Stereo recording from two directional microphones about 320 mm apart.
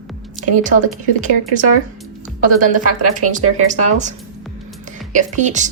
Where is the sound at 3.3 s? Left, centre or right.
Right.